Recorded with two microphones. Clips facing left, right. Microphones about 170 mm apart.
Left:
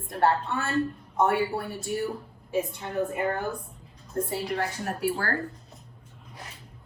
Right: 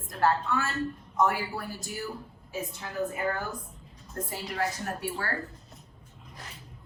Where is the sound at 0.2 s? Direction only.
30° left (ahead or behind).